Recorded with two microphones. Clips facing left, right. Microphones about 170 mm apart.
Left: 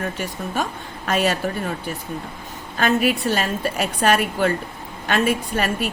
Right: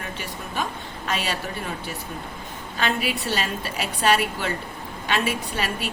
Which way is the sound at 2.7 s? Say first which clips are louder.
Left 7 dB; 45° left (ahead or behind).